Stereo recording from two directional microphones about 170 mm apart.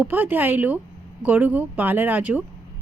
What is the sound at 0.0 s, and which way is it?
A woman's voice, 10° right (ahead or behind).